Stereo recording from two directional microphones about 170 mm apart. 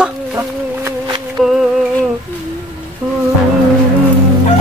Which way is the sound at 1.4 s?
Centre (ahead or behind).